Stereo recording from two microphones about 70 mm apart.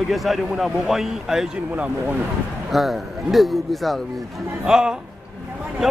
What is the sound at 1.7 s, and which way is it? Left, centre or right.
Speech, centre.